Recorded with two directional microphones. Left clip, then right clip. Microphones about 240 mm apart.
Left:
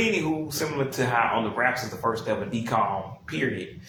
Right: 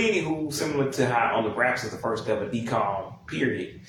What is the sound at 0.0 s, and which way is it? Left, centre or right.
Speech, left.